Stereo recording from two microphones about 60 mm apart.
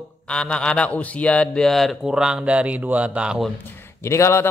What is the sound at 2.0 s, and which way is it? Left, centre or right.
Speech, centre.